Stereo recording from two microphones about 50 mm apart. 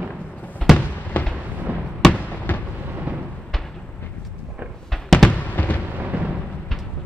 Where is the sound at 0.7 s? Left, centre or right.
Centre.